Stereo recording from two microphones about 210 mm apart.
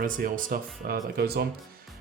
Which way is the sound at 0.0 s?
40° right (ahead or behind).